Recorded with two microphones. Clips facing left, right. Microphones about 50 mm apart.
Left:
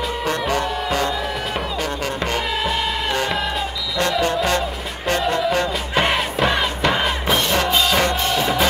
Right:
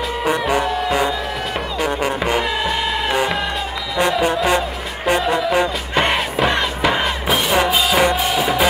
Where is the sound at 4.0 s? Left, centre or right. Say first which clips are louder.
Right 3 dB; centre.